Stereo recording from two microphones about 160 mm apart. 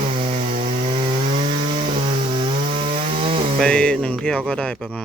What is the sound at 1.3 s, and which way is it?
Chainsaw, 45° right (ahead or behind).